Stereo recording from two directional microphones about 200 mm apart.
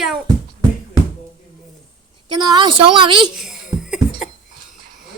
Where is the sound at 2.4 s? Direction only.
20° right (ahead or behind).